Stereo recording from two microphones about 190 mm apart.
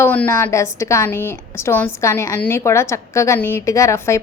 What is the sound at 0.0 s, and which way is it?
A woman's voice, 10° left (ahead or behind).